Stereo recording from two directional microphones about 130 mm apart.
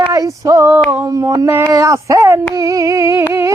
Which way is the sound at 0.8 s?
20° right (ahead or behind).